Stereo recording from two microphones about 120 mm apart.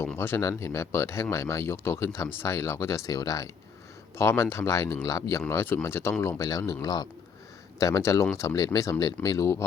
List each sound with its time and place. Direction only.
0.2 s a man's voice: 20° left (ahead or behind)